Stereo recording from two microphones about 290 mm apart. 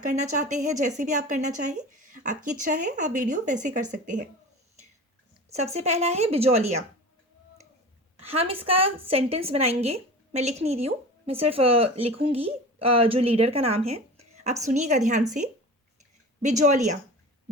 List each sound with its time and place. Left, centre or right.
0.0 s a woman's voice: right
5.5 s a woman's voice: right
8.1 s a woman's voice: right